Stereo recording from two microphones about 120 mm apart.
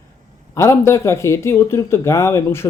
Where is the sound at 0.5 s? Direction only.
20° left (ahead or behind).